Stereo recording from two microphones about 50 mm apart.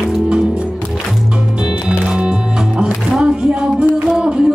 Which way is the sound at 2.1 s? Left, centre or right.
Centre.